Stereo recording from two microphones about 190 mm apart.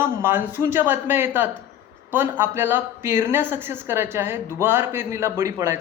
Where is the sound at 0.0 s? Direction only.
10° right (ahead or behind).